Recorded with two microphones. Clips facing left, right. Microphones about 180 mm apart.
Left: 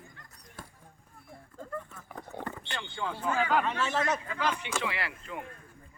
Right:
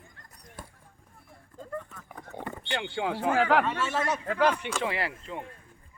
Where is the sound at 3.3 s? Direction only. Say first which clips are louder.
Right 4 dB; 80° right.